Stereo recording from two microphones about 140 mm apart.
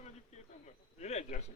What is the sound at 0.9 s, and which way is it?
Speech, 50° left (ahead or behind).